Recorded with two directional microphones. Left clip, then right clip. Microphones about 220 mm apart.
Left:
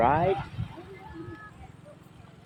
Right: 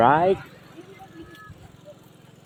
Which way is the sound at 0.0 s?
25° right (ahead or behind).